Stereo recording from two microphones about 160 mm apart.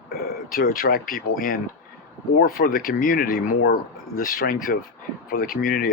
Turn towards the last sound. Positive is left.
turn(degrees=65)  # may be behind; listen again after turning